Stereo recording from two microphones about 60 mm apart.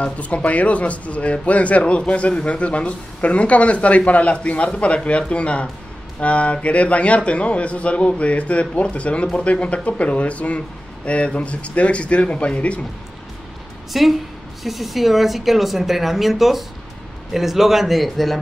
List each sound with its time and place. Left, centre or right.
0.0 s speech: left
13.9 s a woman's voice: centre